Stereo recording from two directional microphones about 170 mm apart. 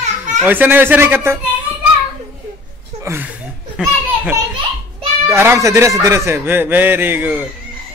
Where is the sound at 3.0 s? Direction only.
15° right (ahead or behind).